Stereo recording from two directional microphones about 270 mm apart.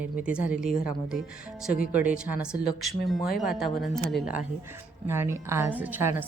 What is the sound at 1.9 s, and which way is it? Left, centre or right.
A woman's voice, centre.